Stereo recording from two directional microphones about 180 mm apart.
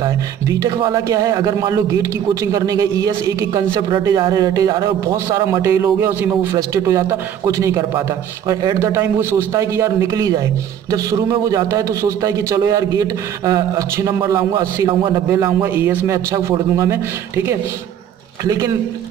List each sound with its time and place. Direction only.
0.0 s a man's voice: 20° right (ahead or behind)